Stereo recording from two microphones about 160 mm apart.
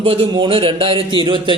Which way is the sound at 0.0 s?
35° right (ahead or behind).